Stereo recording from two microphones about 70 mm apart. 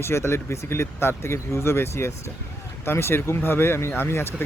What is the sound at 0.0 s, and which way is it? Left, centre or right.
Speech, left.